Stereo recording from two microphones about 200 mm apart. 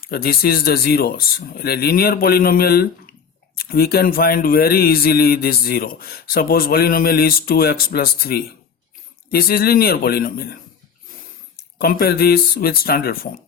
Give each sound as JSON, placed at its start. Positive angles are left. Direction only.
{"t": 0.1, "sound": "a man's voice", "side_deg": 50}
{"t": 11.8, "sound": "a man's voice", "side_deg": 50}